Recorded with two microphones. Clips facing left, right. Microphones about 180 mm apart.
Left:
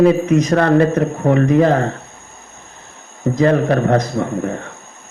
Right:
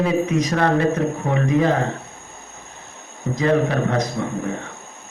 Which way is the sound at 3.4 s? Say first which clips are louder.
Left 4 dB; 50° left (ahead or behind).